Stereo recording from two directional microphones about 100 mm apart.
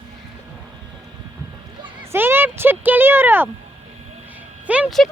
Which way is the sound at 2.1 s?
20° right (ahead or behind).